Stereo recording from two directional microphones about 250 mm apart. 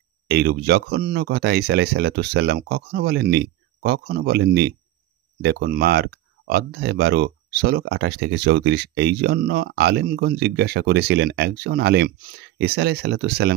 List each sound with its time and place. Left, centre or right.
0.3 s speech: right